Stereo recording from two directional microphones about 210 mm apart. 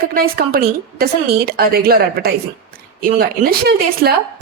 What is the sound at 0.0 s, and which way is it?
A woman's voice, 45° right (ahead or behind).